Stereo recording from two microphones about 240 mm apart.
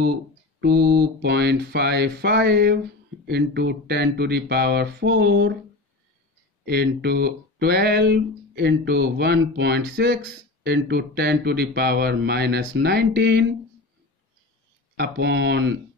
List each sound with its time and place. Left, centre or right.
0.6 s speech: right
6.6 s speech: right
15.0 s speech: right